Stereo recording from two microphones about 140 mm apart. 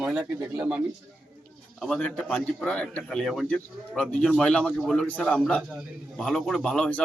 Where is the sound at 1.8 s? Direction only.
5° left (ahead or behind).